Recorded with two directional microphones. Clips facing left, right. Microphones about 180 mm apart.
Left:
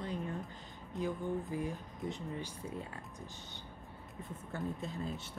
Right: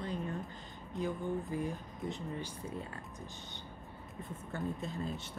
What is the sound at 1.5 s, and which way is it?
Speech, 5° left (ahead or behind).